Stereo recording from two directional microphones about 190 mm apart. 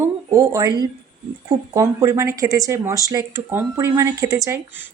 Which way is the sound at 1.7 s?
15° right (ahead or behind).